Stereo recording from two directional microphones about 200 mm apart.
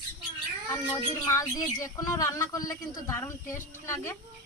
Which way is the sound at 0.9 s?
15° left (ahead or behind).